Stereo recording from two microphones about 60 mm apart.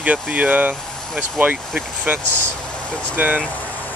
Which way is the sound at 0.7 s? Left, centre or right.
Centre.